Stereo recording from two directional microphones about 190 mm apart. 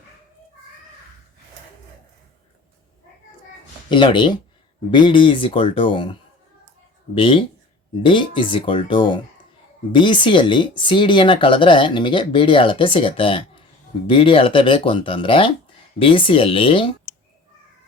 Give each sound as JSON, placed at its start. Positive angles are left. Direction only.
{"t": 3.8, "sound": "speech", "side_deg": 25}